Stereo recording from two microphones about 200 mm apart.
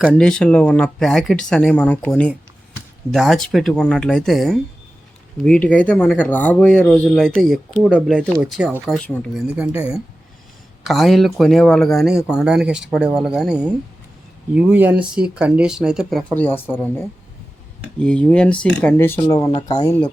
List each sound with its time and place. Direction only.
0.0 s speech: centre (ahead or behind)
9.6 s speech: 5° right (ahead or behind); by 16.6 s 10° left (ahead or behind)
18.0 s speech: 5° left (ahead or behind)